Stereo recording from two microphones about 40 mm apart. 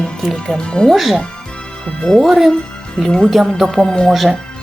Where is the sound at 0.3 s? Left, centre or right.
Left.